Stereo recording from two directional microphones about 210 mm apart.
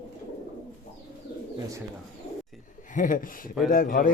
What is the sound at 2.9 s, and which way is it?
Speech, 40° left (ahead or behind).